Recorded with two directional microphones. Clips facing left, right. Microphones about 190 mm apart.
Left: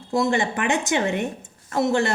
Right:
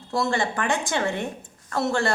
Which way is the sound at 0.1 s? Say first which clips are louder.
Left 3 dB; 20° left (ahead or behind).